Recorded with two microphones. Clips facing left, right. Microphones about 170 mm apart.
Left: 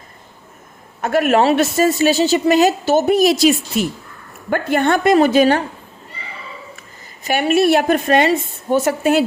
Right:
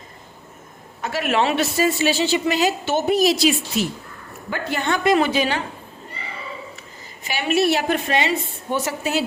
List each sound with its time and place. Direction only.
1.0 s a man's voice: 50° left (ahead or behind)
7.3 s a man's voice: 50° left (ahead or behind)